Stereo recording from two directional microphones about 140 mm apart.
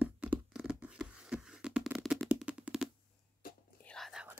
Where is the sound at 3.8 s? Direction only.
5° left (ahead or behind).